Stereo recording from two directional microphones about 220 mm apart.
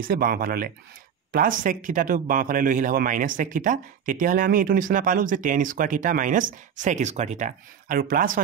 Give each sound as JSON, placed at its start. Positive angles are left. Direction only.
{"t": 0.1, "sound": "a man's voice", "side_deg": -40}